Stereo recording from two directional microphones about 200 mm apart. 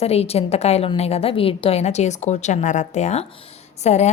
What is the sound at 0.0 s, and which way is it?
A woman's voice, 30° left (ahead or behind).